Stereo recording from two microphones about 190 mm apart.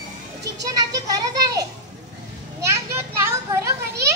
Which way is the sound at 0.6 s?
20° right (ahead or behind).